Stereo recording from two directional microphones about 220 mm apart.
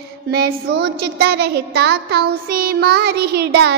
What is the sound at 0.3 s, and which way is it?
Speech, 45° right (ahead or behind).